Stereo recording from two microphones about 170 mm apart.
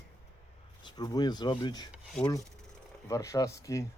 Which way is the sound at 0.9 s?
25° left (ahead or behind).